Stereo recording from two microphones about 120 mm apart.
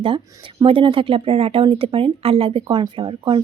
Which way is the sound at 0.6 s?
45° right (ahead or behind).